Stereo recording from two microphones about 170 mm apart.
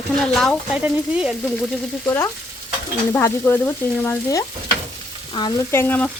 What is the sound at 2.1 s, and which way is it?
Frying, 15° left (ahead or behind).